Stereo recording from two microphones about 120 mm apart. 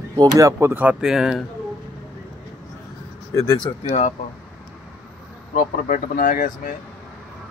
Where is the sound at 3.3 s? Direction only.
35° left (ahead or behind).